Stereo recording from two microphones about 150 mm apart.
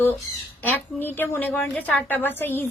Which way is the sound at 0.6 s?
15° left (ahead or behind).